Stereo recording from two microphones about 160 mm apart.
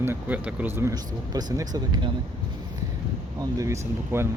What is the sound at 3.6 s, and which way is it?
Speech, 20° right (ahead or behind).